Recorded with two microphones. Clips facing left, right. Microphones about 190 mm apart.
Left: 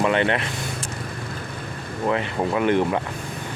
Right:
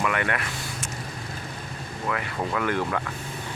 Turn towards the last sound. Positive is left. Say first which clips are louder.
# left 6 dB
turn(degrees=20)  # may be behind; listen again after turning